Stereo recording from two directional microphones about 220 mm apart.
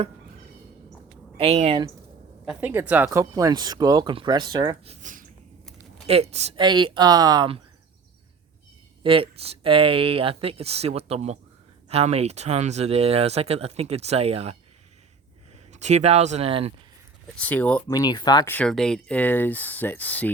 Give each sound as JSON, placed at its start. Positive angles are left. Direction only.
{"t": 1.4, "sound": "speech", "side_deg": -25}
{"t": 2.5, "sound": "speech", "side_deg": -10}
{"t": 5.0, "sound": "a sound", "side_deg": -35}
{"t": 6.1, "sound": "speech", "side_deg": -30}
{"t": 9.0, "sound": "speech", "side_deg": -25}
{"t": 15.7, "sound": "speech", "side_deg": -30}
{"t": 17.3, "sound": "speech", "side_deg": 5}
{"t": 18.5, "sound": "speech", "side_deg": 5}